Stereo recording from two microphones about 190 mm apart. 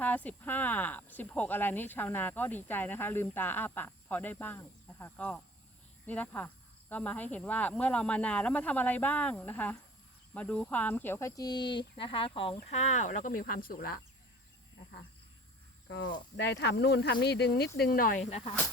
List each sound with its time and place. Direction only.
0.0 s speech: 10° left (ahead or behind); by 14.0 s 50° left (ahead or behind)
15.9 s speech: 75° left (ahead or behind)
16.4 s speech: 60° left (ahead or behind)
17.7 s speech: 50° left (ahead or behind)